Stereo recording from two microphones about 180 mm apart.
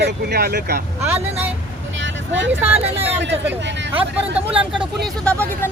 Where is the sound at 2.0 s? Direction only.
90° right.